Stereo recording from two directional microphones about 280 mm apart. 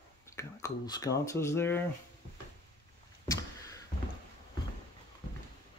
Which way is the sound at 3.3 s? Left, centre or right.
Centre.